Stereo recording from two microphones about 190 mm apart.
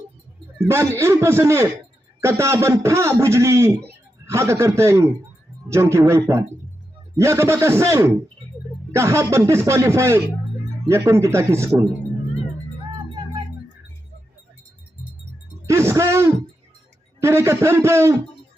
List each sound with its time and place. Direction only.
0.6 s a man's voice: 15° right (ahead or behind)
13.0 s music: 25° right (ahead or behind)
15.6 s a sound: 15° right (ahead or behind)
17.2 s a man's voice: 15° right (ahead or behind)